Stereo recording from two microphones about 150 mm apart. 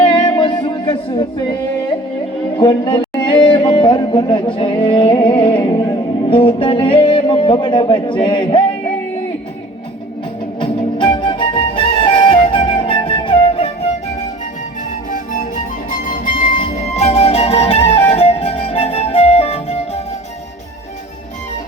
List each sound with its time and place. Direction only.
0.0 s music: 30° left (ahead or behind)
2.6 s music: 30° left (ahead or behind)
5.8 s music: 25° left (ahead or behind)
6.3 s speech: 35° left (ahead or behind)
8.2 s a sound: 30° left (ahead or behind)
10.6 s music: 35° left (ahead or behind)
15.1 s music: 60° left (ahead or behind); by 20.0 s 45° left (ahead or behind)